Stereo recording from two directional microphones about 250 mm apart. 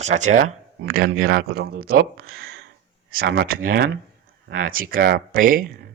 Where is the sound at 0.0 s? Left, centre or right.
Right.